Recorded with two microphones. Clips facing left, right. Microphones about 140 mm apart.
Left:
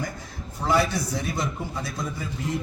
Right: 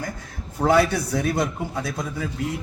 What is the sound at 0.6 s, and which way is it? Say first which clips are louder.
A man's voice: right 5 dB; 60° right (ahead or behind).